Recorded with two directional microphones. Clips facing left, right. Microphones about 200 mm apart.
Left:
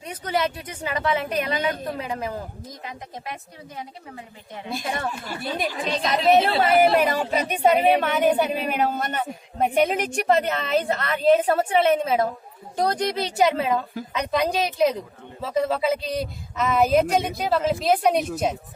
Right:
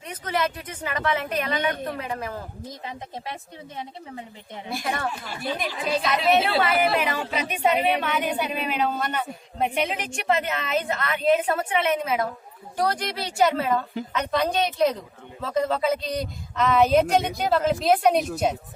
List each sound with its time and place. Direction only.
0.4 s a woman's voice: 15° left (ahead or behind)
2.0 s a woman's voice: 15° left (ahead or behind)
2.6 s speech: 25° right (ahead or behind)
4.7 s a woman's voice: 20° left (ahead or behind)
5.2 s speech: 45° left (ahead or behind)
5.9 s speech: 5° right (ahead or behind)
6.6 s a woman's voice: 45° left (ahead or behind); by 18.5 s centre (ahead or behind)